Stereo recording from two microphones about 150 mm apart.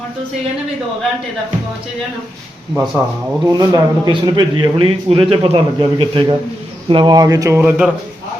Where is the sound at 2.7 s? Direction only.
5° right (ahead or behind).